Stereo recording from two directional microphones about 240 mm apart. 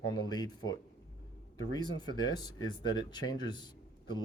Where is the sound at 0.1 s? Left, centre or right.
Centre.